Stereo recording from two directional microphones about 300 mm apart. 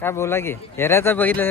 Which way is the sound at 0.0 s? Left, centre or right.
Centre.